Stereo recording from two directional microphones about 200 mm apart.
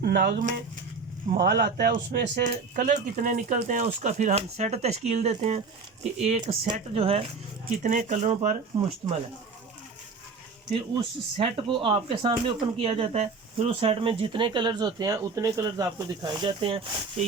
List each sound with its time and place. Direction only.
0.0 s speech: 55° right (ahead or behind); by 7.3 s 30° right (ahead or behind)
7.8 s speech: 40° right (ahead or behind)
10.7 s speech: 25° right (ahead or behind)